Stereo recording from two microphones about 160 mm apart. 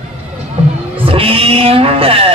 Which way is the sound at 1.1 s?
35° right (ahead or behind).